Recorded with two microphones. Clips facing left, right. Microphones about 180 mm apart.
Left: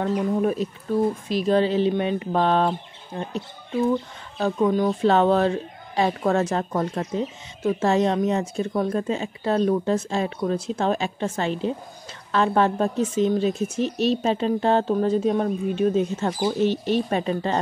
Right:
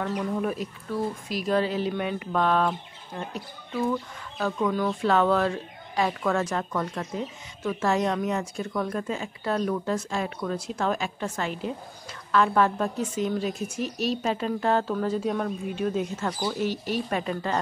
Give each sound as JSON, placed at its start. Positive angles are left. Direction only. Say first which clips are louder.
{"t": 0.0, "sound": "speech", "louder": "left 5 dB", "side_deg": 30}